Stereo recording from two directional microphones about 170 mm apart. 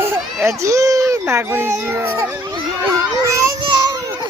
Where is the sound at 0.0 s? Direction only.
15° right (ahead or behind).